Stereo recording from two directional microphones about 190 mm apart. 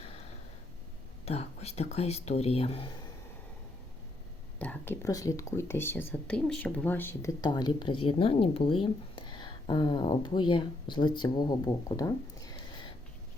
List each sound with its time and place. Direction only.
1.2 s speech: 35° left (ahead or behind)
4.6 s speech: 10° left (ahead or behind)